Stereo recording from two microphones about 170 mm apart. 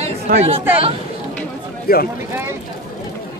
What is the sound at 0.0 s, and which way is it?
Chatter, 40° right (ahead or behind).